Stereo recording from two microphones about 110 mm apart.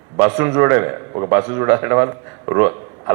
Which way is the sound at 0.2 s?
25° right (ahead or behind).